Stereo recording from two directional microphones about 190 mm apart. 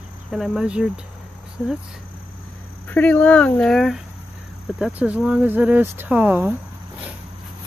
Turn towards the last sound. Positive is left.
turn(degrees=-10)  # may be behind; listen again after turning